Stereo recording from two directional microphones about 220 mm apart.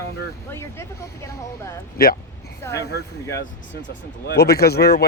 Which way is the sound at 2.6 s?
10° left (ahead or behind).